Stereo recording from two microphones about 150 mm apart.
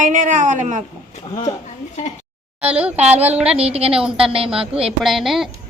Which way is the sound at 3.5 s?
40° right (ahead or behind).